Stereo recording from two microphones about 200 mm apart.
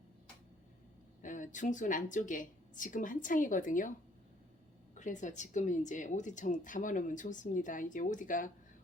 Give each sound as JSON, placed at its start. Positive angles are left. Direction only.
{"t": 1.2, "sound": "speech", "side_deg": 40}
{"t": 4.9, "sound": "speech", "side_deg": 40}